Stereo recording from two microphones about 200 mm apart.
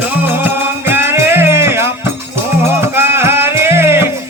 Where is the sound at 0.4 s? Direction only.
10° right (ahead or behind).